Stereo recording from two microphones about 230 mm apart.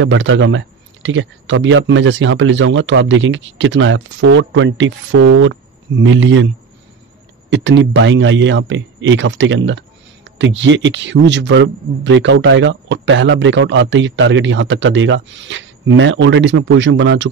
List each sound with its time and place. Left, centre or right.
0.0 s speech: right